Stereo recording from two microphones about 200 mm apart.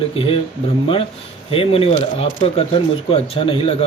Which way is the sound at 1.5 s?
30° left (ahead or behind).